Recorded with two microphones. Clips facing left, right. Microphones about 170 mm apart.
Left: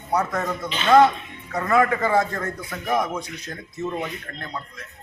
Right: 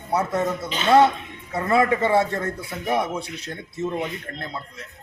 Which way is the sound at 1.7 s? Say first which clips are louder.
Right 1 dB; 30° right (ahead or behind).